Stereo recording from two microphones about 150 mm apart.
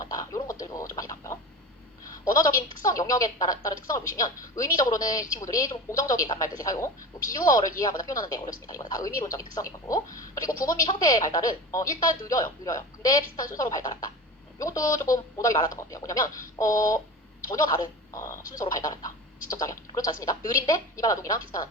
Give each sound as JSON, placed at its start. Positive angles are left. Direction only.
{"t": 0.0, "sound": "a sound", "side_deg": 25}
{"t": 0.6, "sound": "chicken", "side_deg": 25}
{"t": 2.2, "sound": "a woman's voice", "side_deg": 25}